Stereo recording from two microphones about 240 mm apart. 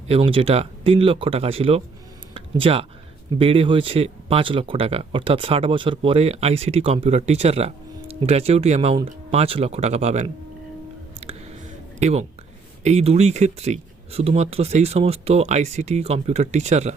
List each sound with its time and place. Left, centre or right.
0.1 s speech: right
11.9 s speech: right